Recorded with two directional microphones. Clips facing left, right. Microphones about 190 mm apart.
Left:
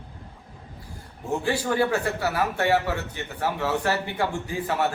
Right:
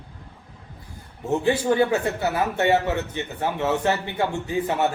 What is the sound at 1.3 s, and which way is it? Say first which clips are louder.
A man's voice: right 4 dB; 20° right (ahead or behind).